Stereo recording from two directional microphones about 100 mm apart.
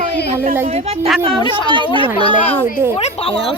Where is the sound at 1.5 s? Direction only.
55° right (ahead or behind).